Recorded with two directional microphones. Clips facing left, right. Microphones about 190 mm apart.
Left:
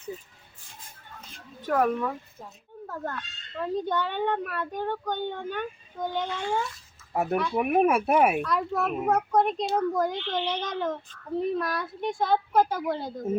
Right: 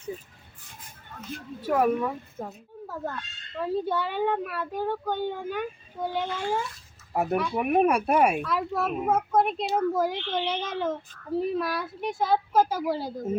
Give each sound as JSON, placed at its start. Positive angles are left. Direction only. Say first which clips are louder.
{"t": 1.6, "sound": "speech", "louder": "right 1 dB", "side_deg": -10}
{"t": 2.4, "sound": "a woman's voice", "louder": "right 9 dB", "side_deg": -55}
{"t": 2.8, "sound": "a child's voice", "louder": "even", "side_deg": -5}